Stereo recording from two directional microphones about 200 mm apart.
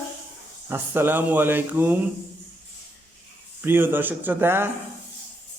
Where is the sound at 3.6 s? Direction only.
10° right (ahead or behind).